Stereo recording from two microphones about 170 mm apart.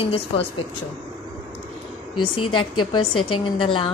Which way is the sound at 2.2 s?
30° left (ahead or behind).